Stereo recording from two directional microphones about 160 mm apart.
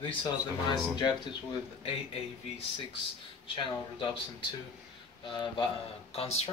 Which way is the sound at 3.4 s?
35° left (ahead or behind).